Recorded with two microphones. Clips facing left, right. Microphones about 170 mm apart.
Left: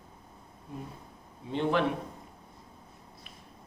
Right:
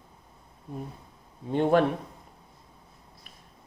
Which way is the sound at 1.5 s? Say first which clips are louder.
Right 6 dB; 45° right (ahead or behind).